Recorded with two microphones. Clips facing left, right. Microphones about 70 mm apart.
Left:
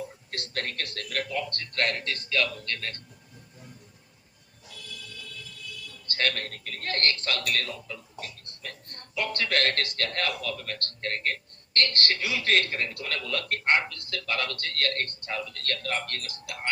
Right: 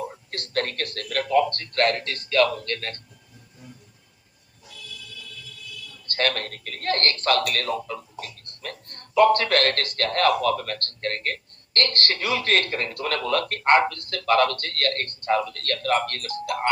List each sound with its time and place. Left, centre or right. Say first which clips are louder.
0.3 s speech: right 6 dB; right
4.7 s music: right 2 dB; left
6.1 s speech: right 4 dB; right